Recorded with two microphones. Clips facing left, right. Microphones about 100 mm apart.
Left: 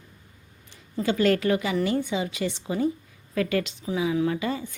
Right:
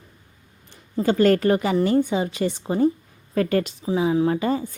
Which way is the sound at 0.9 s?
40° right (ahead or behind).